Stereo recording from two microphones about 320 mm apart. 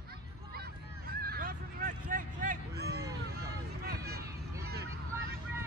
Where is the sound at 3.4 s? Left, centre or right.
Right.